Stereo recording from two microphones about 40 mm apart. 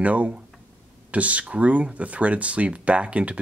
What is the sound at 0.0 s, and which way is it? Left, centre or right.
Speech, right.